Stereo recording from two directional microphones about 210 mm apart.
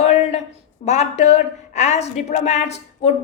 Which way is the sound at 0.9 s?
30° left (ahead or behind).